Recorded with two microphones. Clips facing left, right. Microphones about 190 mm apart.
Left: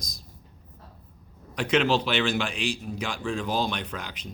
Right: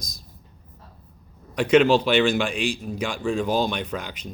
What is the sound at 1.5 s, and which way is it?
Speech, 50° right (ahead or behind).